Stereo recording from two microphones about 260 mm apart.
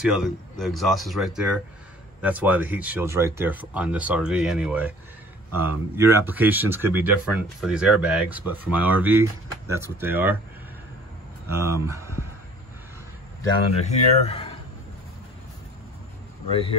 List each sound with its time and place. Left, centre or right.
0.0 s speech: centre
11.4 s speech: centre
13.7 s speech: left
16.4 s speech: left